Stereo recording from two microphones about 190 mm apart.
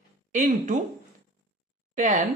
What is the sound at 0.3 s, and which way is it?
Speech, 40° right (ahead or behind).